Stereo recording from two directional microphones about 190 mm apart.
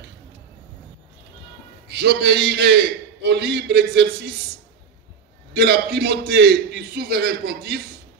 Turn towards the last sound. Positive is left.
turn(degrees=-60)  # may be behind; listen again after turning